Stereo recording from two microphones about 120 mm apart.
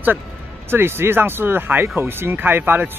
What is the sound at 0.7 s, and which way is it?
Speech, 20° right (ahead or behind).